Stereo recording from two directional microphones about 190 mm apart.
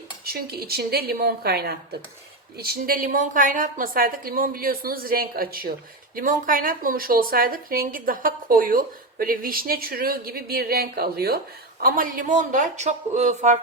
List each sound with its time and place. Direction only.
0.3 s speech: 55° right (ahead or behind); by 13.6 s 40° right (ahead or behind)